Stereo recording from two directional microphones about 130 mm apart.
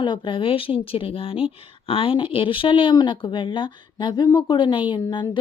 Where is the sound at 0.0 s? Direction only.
40° left (ahead or behind).